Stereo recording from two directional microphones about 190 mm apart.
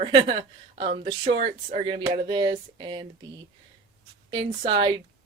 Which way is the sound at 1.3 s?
40° right (ahead or behind).